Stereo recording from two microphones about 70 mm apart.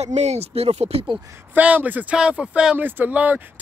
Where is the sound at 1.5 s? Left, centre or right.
Right.